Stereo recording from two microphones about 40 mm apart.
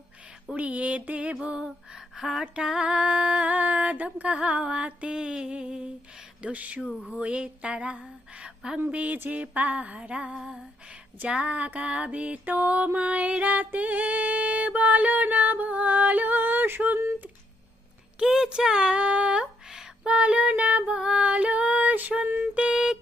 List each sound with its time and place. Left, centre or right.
0.5 s music: right
1.4 s mantra: right
3.5 s mantra: right
6.5 s music: right
7.1 s mantra: right
8.4 s a woman's voice: right
8.9 s music: right
10.3 s a sound: centre
11.3 s music: right
12.5 s music: right
18.2 s speech: centre
18.6 s mantra: centre
20.6 s music: right
22.7 s a sound: centre